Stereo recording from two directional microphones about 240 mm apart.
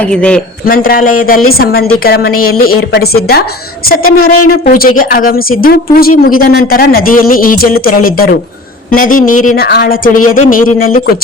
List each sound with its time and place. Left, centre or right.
0.0 s a man's voice: centre
0.6 s speech: left